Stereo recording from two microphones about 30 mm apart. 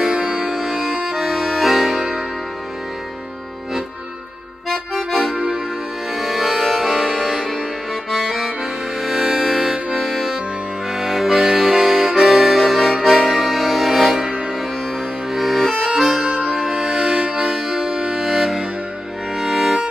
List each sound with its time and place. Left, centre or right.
0.3 s accordion: centre
6.1 s music: centre
7.4 s accordion: centre
9.0 s music: centre
9.9 s accordion: centre
15.3 s accordion: centre
16.0 s music: centre
16.8 s music: right
17.5 s music: centre
17.9 s music: centre
18.2 s music: centre